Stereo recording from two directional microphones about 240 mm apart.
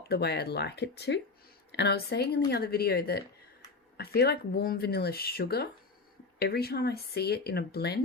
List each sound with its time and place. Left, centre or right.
0.1 s speech: left